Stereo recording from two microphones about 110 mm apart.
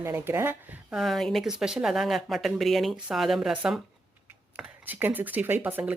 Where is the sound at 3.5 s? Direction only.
10° right (ahead or behind).